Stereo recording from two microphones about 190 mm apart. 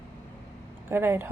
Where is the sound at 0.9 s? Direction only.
10° right (ahead or behind).